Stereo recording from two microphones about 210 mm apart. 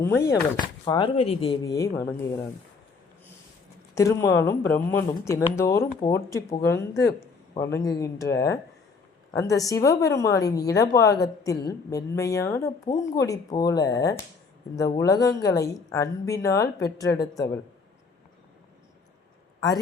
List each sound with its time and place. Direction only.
0.0 s a woman's voice: 10° left (ahead or behind)
0.9 s speech: 20° left (ahead or behind)
3.9 s a woman's voice: 15° left (ahead or behind)